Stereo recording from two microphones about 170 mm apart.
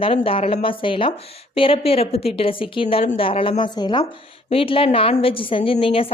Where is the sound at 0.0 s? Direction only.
35° left (ahead or behind).